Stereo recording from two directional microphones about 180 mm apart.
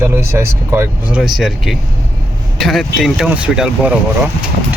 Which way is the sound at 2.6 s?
Centre (ahead or behind).